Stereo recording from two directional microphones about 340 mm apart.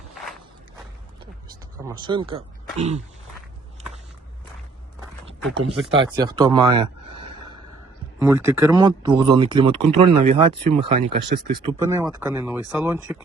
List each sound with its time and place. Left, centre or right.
1.5 s speech: centre
5.4 s speech: centre
5.9 s speech: centre
8.2 s speech: centre